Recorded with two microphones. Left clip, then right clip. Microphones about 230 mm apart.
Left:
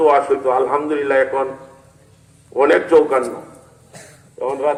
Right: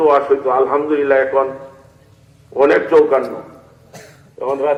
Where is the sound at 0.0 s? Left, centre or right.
Left.